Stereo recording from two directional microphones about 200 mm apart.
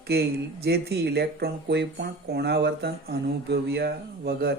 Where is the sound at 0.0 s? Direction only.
55° right (ahead or behind).